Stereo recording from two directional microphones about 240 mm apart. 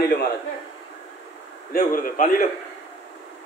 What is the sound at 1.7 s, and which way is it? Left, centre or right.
Speech, left.